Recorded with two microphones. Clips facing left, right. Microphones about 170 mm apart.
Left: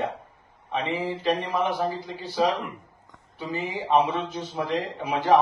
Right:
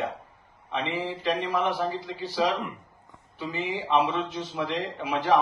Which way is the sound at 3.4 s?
45° left (ahead or behind).